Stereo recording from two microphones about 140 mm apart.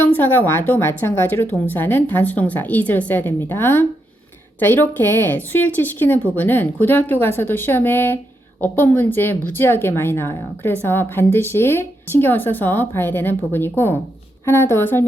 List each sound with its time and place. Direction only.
0.0 s speech: 15° left (ahead or behind)